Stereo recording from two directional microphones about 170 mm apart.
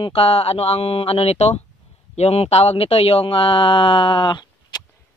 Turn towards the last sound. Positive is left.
turn(degrees=25)  # may be behind; listen again after turning